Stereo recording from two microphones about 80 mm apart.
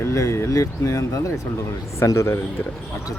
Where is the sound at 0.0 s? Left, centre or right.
Left.